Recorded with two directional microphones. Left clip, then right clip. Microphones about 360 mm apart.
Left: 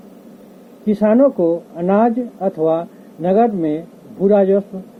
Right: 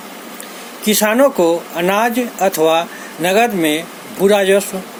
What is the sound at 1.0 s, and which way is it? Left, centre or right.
Speech, right.